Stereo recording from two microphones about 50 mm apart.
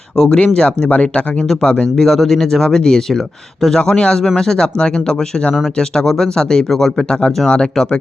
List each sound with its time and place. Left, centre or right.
0.2 s speech: centre
2.0 s speech: centre
3.8 s speech: centre